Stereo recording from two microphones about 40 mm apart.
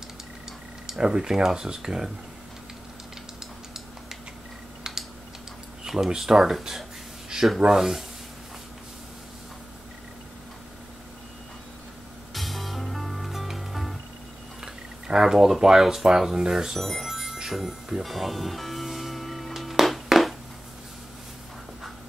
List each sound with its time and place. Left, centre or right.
0.8 s speech: centre
5.9 s speech: centre
6.5 s a sound: centre
7.7 s speech: centre
12.4 s music: centre
14.6 s a sound: centre
15.3 s speech: centre
16.7 s speech: centre
17.1 s music: centre
17.5 s speech: centre
18.0 s music: centre